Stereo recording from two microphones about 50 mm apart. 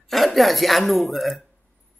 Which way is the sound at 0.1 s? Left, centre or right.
Centre.